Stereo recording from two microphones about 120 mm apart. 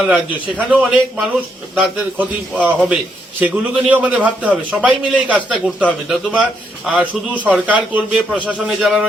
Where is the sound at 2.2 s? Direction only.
10° right (ahead or behind).